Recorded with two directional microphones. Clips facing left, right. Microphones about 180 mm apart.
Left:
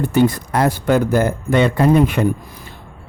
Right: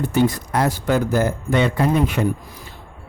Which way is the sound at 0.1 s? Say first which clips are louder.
Left 3 dB; 55° left (ahead or behind).